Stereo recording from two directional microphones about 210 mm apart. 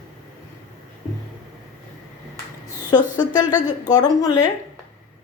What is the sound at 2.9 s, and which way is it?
A woman's voice, 20° left (ahead or behind).